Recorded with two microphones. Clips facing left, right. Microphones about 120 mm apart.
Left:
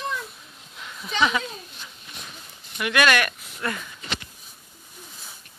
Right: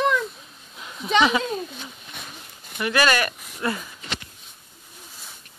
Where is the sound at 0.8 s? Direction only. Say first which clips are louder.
Right 3 dB; 15° right (ahead or behind).